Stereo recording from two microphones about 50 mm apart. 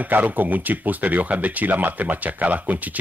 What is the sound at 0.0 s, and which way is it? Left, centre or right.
Speech, right.